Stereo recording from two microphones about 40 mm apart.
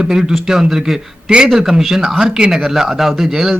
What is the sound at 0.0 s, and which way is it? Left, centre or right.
Speech, centre.